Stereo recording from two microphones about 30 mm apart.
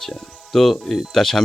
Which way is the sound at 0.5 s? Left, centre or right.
Centre.